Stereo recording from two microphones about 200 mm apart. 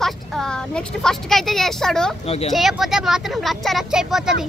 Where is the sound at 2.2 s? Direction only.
30° left (ahead or behind).